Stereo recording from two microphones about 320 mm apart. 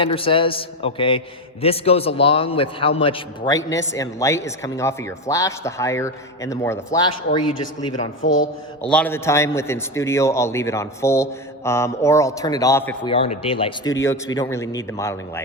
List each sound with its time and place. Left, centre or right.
0.0 s a man's voice: centre
7.4 s a man's voice: left
8.2 s a man's voice: left
8.9 s a man's voice: centre
13.1 s a man's voice: centre